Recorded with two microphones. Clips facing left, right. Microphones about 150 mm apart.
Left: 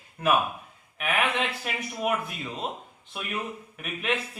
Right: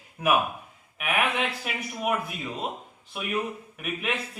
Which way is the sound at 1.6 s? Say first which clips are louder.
Even; centre (ahead or behind).